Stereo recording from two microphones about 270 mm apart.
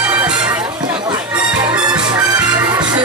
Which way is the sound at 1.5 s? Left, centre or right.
Centre.